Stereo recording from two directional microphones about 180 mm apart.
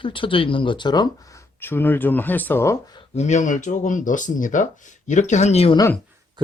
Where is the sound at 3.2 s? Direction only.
40° left (ahead or behind).